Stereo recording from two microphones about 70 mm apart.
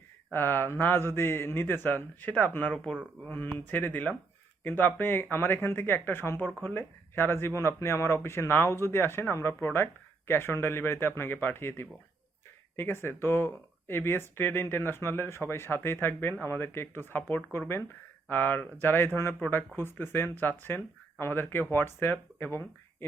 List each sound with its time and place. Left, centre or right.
0.3 s speech: left
2.7 s speech: centre
3.2 s speech: left